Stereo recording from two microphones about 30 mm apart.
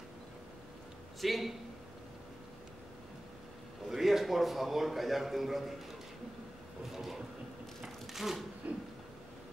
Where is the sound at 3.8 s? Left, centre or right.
Centre.